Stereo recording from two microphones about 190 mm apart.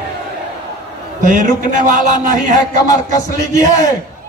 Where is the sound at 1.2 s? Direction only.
45° right (ahead or behind).